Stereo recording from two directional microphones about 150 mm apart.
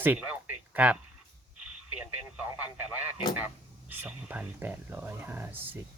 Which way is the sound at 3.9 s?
10° right (ahead or behind).